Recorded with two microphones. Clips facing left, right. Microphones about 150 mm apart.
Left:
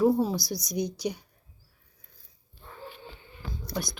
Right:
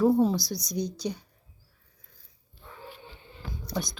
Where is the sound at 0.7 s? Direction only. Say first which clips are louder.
Left 1 dB; 10° left (ahead or behind).